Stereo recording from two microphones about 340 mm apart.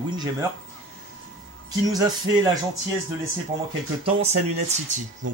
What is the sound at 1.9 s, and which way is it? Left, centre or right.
Speech, centre.